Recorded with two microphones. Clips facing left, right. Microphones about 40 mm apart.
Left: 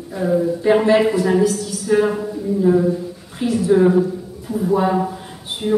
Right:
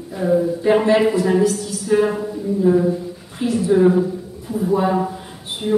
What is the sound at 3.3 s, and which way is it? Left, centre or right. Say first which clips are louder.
A woman's voice: left 1 dB; centre.